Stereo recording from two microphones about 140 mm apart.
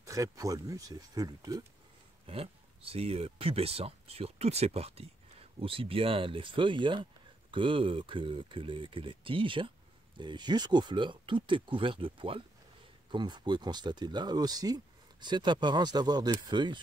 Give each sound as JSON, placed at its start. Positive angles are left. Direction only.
{"t": 0.0, "sound": "speech", "side_deg": -25}
{"t": 2.2, "sound": "speech", "side_deg": -45}